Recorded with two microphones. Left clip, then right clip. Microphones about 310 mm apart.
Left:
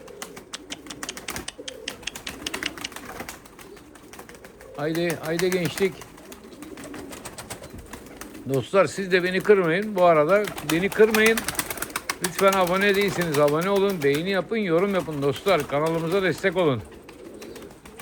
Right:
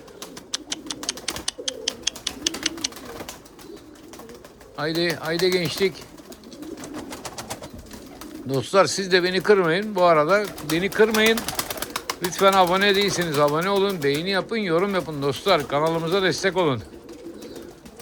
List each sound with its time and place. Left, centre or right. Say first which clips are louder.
0.5 s bird: right 11 dB; centre
4.8 s speech: right 2 dB; centre
8.4 s speech: right 2 dB; centre
11.9 s bird: even; centre
12.3 s speech: right 3 dB; centre